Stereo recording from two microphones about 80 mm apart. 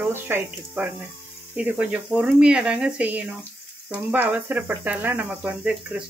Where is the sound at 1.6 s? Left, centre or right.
Centre.